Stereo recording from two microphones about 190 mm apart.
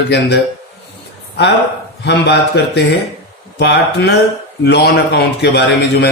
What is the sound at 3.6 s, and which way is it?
A man's voice, 60° left (ahead or behind).